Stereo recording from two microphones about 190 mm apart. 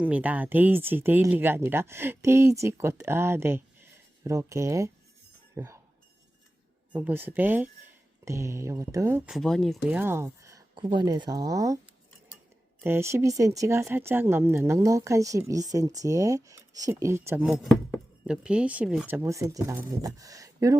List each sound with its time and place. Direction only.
0.0 s speech: 10° right (ahead or behind)
7.0 s speech: 10° right (ahead or behind)
10.0 s a sound: 10° right (ahead or behind)
10.8 s speech: 20° right (ahead or behind)
12.8 s speech: 15° right (ahead or behind)
17.6 s speech: centre (ahead or behind); by 20.7 s 15° right (ahead or behind)